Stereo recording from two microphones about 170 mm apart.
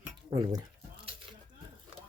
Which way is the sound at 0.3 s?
25° right (ahead or behind).